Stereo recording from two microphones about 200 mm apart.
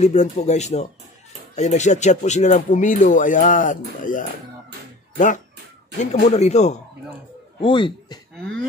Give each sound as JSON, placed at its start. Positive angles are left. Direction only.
{"t": 0.0, "sound": "speech", "side_deg": 35}